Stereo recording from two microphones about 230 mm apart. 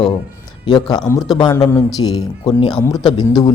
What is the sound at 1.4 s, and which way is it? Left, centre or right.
Speech, centre.